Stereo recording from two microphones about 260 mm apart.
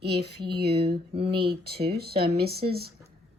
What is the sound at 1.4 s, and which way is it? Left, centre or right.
A woman's voice, right.